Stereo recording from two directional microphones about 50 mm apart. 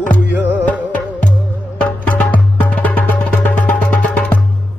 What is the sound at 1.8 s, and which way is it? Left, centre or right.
Music, left.